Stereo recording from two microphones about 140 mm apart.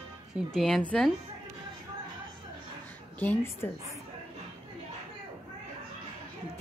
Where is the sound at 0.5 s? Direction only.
Centre (ahead or behind).